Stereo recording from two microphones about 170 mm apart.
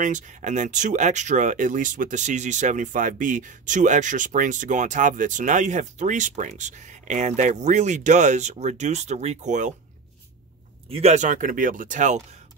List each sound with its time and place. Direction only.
0.0 s speech: 45° right (ahead or behind)
10.9 s speech: 40° right (ahead or behind)